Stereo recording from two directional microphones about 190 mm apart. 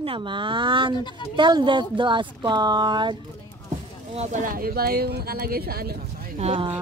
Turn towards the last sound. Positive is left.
turn(degrees=-30)  # may be behind; listen again after turning